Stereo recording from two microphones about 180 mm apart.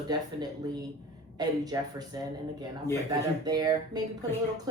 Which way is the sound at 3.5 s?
25° right (ahead or behind).